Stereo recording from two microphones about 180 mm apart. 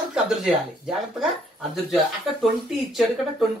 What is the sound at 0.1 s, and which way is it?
Speech, 5° right (ahead or behind).